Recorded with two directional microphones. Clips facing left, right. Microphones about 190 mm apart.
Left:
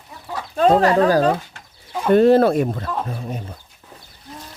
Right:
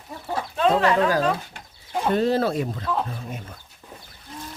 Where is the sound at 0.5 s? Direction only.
40° left (ahead or behind).